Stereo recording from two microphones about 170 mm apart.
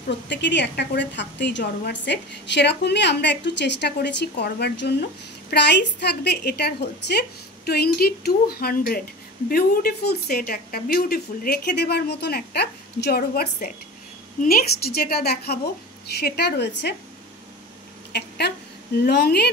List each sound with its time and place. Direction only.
0.3 s a woman's voice: 90° left
18.4 s a woman's voice: 90° left
19.0 s a woman's voice: 75° left (ahead or behind)